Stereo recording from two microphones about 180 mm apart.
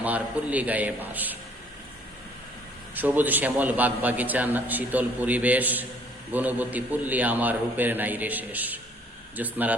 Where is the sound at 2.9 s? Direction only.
10° right (ahead or behind).